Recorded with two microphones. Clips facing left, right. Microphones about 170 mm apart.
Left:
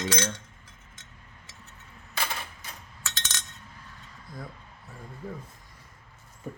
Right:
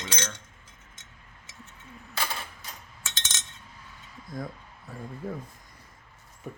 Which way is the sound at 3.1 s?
20° right (ahead or behind).